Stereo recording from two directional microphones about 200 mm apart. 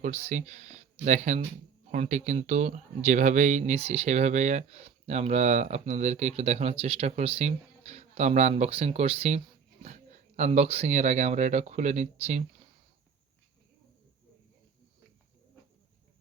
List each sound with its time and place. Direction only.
0.0 s speech: 35° right (ahead or behind)